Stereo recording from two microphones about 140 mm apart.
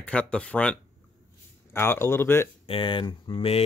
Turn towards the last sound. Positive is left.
turn(degrees=40)  # may be behind; listen again after turning